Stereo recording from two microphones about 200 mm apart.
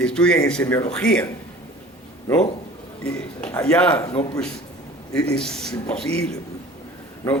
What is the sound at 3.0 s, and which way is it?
A man's voice, 5° left (ahead or behind).